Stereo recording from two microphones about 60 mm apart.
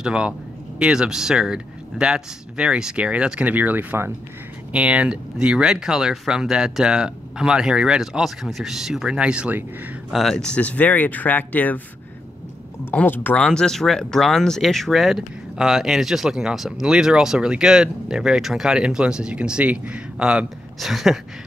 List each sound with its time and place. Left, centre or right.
0.0 s speech: centre
9.2 s speech: centre
10.3 s speech: centre
13.0 s speech: left
13.4 s speech: centre
20.8 s speech: centre